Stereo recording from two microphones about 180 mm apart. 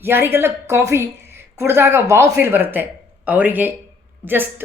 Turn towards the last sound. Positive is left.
turn(degrees=-10)  # may be behind; listen again after turning